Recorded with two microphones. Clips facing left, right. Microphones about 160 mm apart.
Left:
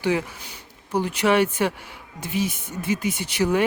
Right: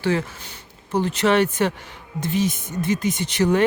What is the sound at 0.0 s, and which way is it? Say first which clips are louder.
Speech: right 1 dB; 10° left (ahead or behind).